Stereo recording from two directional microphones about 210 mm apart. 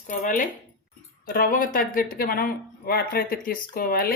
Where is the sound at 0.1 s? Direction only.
40° left (ahead or behind).